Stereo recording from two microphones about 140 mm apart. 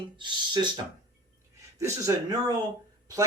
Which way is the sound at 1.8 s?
20° right (ahead or behind).